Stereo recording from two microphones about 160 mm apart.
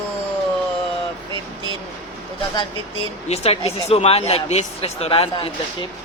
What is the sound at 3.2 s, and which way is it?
Speech, 40° left (ahead or behind).